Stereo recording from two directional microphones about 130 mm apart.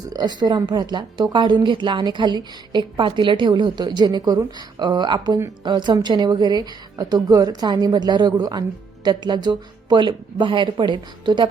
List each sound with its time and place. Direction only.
0.1 s a woman's voice: 30° right (ahead or behind)